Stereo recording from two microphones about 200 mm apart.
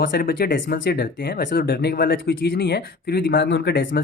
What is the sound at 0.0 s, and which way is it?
Speech, 45° left (ahead or behind).